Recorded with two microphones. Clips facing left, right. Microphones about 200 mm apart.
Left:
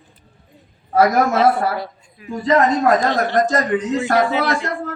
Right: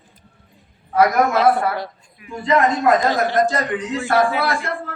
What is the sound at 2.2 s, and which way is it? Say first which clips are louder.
A man's voice: left 2 dB; 40° left (ahead or behind).